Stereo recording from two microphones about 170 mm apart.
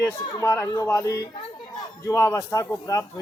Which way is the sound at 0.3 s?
15° left (ahead or behind).